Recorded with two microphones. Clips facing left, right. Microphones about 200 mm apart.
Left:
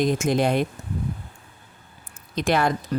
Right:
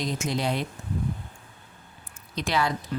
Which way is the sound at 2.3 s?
50° left (ahead or behind).